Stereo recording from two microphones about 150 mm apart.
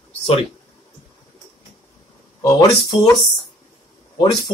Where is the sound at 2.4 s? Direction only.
25° left (ahead or behind).